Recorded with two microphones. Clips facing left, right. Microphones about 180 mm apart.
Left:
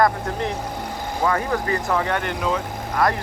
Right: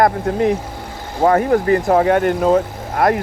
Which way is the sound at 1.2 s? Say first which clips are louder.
Right 9 dB; 45° right (ahead or behind).